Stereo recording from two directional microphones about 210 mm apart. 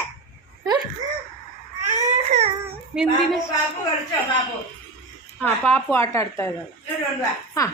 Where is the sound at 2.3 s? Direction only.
30° right (ahead or behind).